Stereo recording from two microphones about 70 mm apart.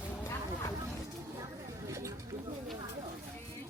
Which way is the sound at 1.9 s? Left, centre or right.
Right.